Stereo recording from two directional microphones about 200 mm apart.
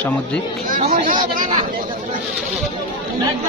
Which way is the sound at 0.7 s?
45° right (ahead or behind).